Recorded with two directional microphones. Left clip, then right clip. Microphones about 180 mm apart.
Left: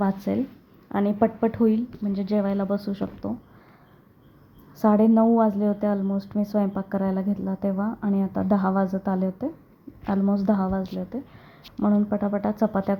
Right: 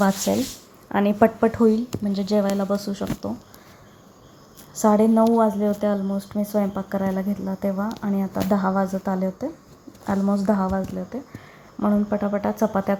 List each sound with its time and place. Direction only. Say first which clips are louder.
0.3 s a woman's voice: right 4 dB; 15° right (ahead or behind)
4.8 s a woman's voice: right 2 dB; 10° right (ahead or behind)